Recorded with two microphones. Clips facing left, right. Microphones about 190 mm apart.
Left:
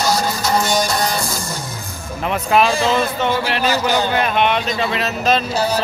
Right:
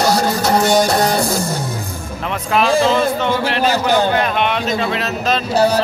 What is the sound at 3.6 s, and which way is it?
Speech, 55° right (ahead or behind).